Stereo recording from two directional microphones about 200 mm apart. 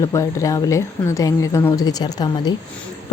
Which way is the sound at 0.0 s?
15° left (ahead or behind).